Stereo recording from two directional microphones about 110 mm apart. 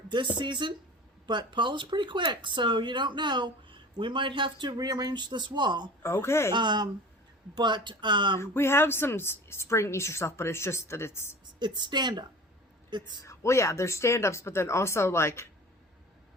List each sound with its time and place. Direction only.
0.3 s speech: 45° right (ahead or behind)
6.0 s a woman's voice: 25° left (ahead or behind)
6.5 s speech: 45° right (ahead or behind)
8.4 s a woman's voice: 20° left (ahead or behind)
11.6 s speech: 40° right (ahead or behind)
13.2 s a woman's voice: 25° left (ahead or behind)